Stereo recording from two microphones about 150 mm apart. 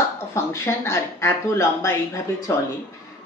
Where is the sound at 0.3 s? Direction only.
20° left (ahead or behind).